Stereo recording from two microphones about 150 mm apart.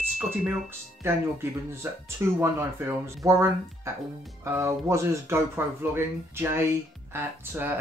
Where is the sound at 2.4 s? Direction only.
15° right (ahead or behind).